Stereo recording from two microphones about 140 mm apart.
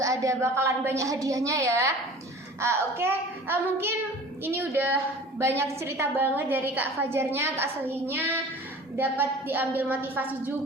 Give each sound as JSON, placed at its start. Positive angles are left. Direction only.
{"t": 0.0, "sound": "a woman's voice", "side_deg": -25}